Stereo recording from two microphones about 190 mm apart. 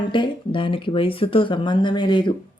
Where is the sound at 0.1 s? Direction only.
25° left (ahead or behind).